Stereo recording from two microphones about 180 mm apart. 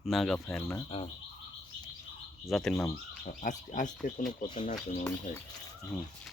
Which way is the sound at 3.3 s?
45° left (ahead or behind).